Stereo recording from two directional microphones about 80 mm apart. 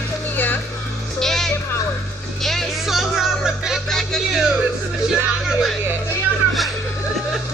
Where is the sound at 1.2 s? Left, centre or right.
Centre.